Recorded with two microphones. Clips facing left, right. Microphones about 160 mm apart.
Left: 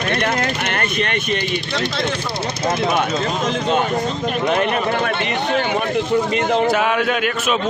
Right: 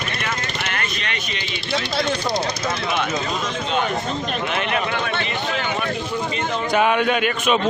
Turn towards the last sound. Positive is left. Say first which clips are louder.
# even
turn(degrees=0)  # may be behind; listen again after turning